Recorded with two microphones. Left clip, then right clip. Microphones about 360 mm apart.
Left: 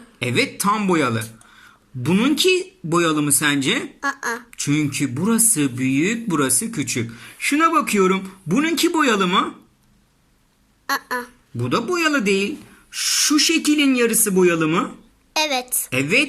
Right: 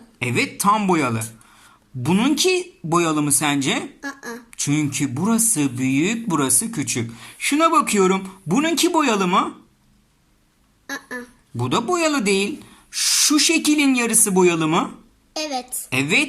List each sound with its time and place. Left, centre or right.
0.2 s speech: centre
4.0 s speech: left
4.5 s speech: centre
10.8 s a sound: left
11.5 s speech: centre
15.3 s a sound: left
15.9 s speech: centre